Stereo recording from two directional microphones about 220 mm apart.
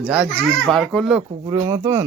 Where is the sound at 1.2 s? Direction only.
15° right (ahead or behind).